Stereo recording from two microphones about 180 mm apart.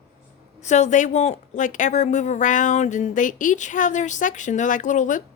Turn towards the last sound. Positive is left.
turn(degrees=45)  # may be behind; listen again after turning